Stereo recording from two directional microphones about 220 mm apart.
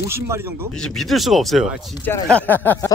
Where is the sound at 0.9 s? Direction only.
Centre (ahead or behind).